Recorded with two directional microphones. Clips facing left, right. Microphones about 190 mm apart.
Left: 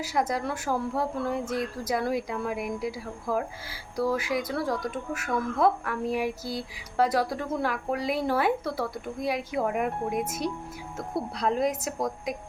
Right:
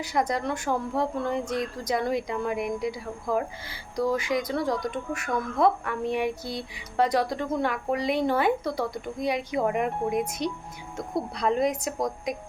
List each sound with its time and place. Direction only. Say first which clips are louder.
0.0 s speech: right 1 dB; 5° left (ahead or behind)